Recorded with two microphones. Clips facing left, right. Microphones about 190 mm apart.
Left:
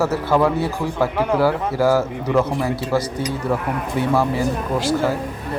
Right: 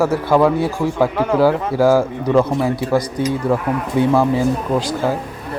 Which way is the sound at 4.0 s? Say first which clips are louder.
Right 4 dB; 15° right (ahead or behind).